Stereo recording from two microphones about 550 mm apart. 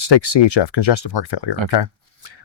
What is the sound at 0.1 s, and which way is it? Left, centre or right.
Speech, left.